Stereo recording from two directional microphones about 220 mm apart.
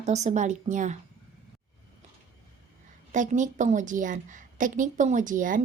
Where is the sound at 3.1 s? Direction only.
35° right (ahead or behind).